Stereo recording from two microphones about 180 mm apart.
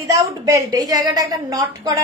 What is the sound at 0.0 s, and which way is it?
A woman's voice, 20° right (ahead or behind).